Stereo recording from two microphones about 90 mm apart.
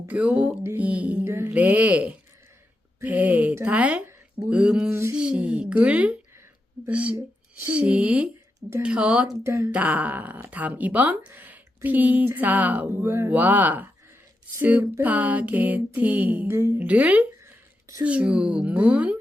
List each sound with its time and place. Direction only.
0.1 s speech: 15° right (ahead or behind)
1.2 s speech: 30° right (ahead or behind)
1.5 s speech: 15° right (ahead or behind)
4.9 s speech: 30° right (ahead or behind)
5.1 s speech: 10° right (ahead or behind)
9.4 s speech: 30° right (ahead or behind)
9.7 s speech: 15° right (ahead or behind)
13.1 s speech: 30° right (ahead or behind)
13.3 s speech: 20° right (ahead or behind)
16.5 s speech: 30° right (ahead or behind)
16.8 s speech: 15° right (ahead or behind)
17.4 s a sound: 35° right (ahead or behind)
18.0 s speech: 15° right (ahead or behind)